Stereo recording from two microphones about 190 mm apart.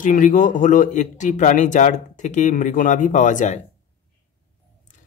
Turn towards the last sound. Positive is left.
turn(degrees=40)  # may be behind; listen again after turning